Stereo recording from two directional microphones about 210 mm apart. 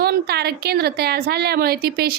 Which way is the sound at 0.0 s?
50° right (ahead or behind).